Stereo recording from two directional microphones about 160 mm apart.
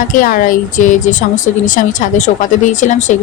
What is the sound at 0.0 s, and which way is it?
A woman's voice, 55° left (ahead or behind).